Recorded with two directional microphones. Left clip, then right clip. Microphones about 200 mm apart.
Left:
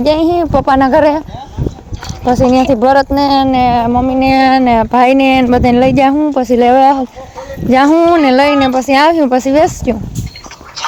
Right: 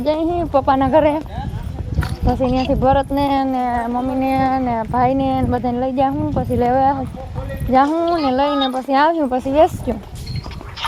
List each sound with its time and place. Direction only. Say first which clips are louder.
0.0 s speech: left 8 dB; 30° left (ahead or behind)
2.2 s speech: left 9 dB; 40° left (ahead or behind)
3.5 s speech: left 9 dB; 50° left (ahead or behind); by 7.0 s 35° left (ahead or behind)
7.7 s speech: left 7 dB; 45° left (ahead or behind)
8.2 s speech: left 8 dB; 30° left (ahead or behind)